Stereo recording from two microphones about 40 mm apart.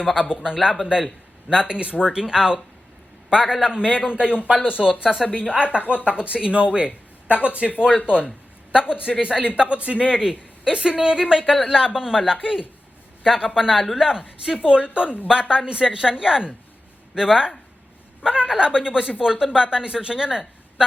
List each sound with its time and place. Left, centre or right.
0.4 s speech: centre
1.5 s speech: right
2.0 s speech: centre
5.1 s speech: centre
5.4 s speech: right
7.8 s speech: right
9.6 s speech: right
10.2 s speech: centre